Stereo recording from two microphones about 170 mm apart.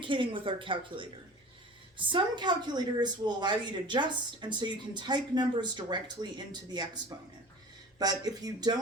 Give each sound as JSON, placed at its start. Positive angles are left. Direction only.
{"t": 0.0, "sound": "a woman's voice", "side_deg": -30}